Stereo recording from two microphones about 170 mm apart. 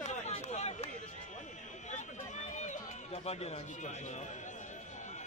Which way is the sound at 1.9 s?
45° left (ahead or behind).